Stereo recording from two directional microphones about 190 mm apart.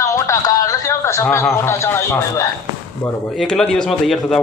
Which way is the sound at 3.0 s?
Centre (ahead or behind).